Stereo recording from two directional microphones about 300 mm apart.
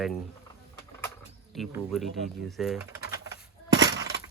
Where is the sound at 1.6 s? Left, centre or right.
Centre.